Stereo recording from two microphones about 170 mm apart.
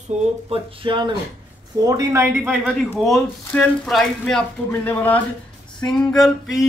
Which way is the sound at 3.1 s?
5° left (ahead or behind).